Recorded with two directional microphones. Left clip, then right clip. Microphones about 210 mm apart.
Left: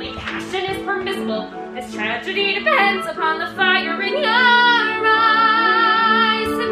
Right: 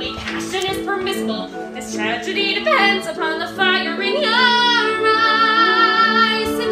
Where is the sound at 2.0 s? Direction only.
15° left (ahead or behind).